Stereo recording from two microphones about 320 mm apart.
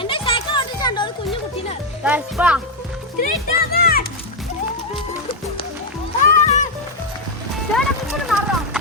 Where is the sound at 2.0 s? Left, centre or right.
Centre.